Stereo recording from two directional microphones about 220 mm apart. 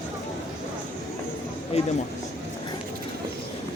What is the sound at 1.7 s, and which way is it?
Speech, 25° left (ahead or behind).